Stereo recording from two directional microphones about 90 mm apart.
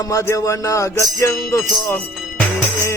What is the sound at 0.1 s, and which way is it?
Music, 35° left (ahead or behind).